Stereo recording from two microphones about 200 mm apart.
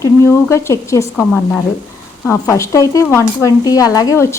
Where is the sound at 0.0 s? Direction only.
15° left (ahead or behind).